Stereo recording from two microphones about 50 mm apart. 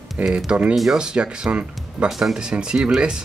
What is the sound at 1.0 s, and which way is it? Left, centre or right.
Speech, centre.